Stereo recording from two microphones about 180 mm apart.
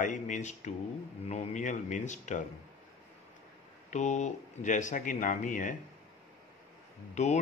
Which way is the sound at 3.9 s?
40° left (ahead or behind).